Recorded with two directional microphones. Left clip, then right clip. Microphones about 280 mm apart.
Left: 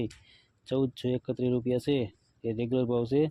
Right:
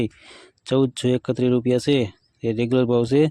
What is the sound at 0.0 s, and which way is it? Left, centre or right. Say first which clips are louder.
Speech: right 9 dB; right.